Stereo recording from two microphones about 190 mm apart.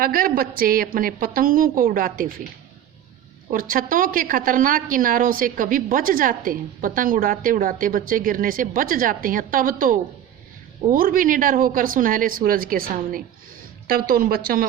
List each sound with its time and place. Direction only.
0.0 s a woman's voice: 50° right (ahead or behind)
3.5 s a woman's voice: 45° right (ahead or behind)